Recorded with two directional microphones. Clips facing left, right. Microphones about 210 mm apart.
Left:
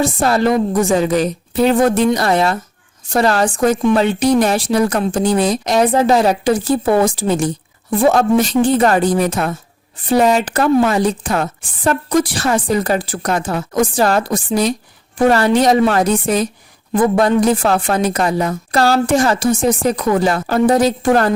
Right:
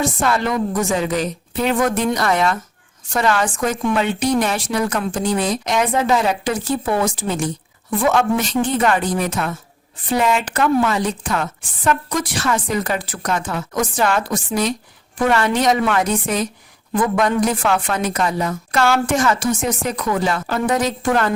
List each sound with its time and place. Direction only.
0.0 s speech: 35° left (ahead or behind)